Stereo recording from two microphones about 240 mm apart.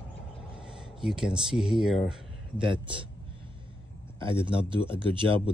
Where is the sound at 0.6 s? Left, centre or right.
Centre.